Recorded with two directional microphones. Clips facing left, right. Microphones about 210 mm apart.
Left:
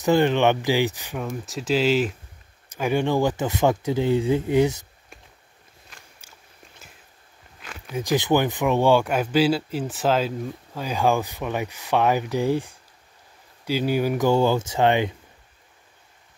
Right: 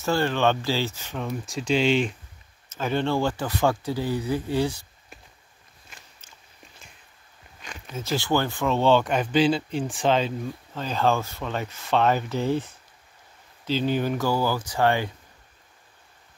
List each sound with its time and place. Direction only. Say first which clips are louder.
0.0 s speech: left 4 dB; 20° left (ahead or behind)
1.3 s speech: even; centre (ahead or behind); by 4.7 s 20° left (ahead or behind)
6.2 s walk: left 2 dB; 10° left (ahead or behind)
7.6 s speech: left 5 dB; 5° left (ahead or behind)